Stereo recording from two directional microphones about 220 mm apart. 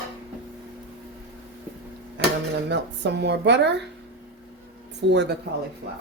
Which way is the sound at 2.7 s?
50° right (ahead or behind).